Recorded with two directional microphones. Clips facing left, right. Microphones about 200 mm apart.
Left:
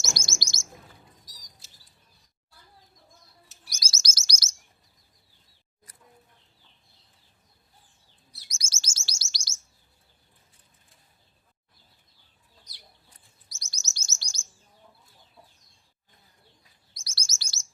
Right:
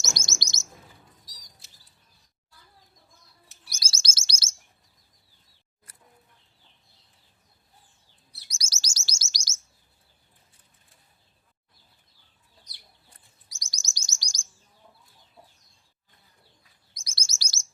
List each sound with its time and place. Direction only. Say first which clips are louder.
0.0 s chirp: left 1 dB; 20° right (ahead or behind)
3.8 s chirp: even; 30° right (ahead or behind)
8.5 s chirp: right 1 dB; 35° right (ahead or behind)
13.5 s chirp: right 2 dB; 15° right (ahead or behind)
16.9 s chirp: right 1 dB; 15° right (ahead or behind)
17.2 s chirp: right 2 dB; 35° right (ahead or behind)